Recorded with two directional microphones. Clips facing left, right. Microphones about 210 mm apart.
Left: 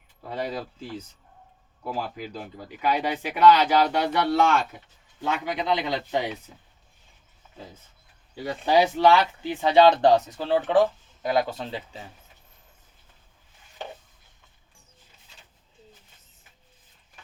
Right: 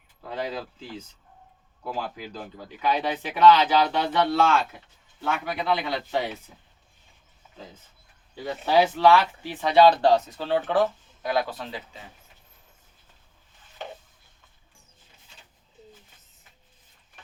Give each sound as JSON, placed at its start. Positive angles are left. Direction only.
{"t": 0.2, "sound": "speech", "side_deg": 10}
{"t": 1.8, "sound": "speech", "side_deg": 10}
{"t": 8.6, "sound": "speech", "side_deg": 15}